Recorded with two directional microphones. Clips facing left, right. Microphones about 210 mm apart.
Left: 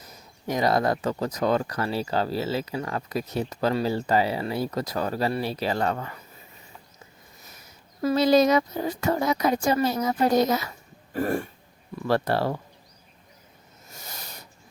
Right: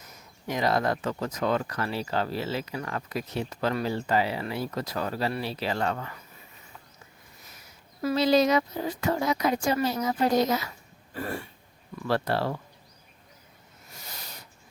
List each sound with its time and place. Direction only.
0.0 s speech: 35° left (ahead or behind)
8.0 s speech: 45° left (ahead or behind)
11.1 s throat clearing: 45° left (ahead or behind)
12.0 s speech: 45° left (ahead or behind)